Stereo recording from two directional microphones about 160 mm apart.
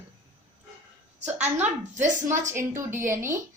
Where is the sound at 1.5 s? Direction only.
10° right (ahead or behind).